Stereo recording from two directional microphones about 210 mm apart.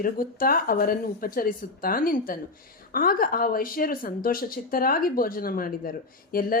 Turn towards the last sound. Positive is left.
turn(degrees=45)  # may be behind; listen again after turning